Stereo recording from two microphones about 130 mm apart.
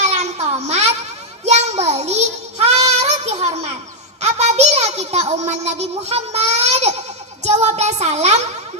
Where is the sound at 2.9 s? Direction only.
60° right (ahead or behind).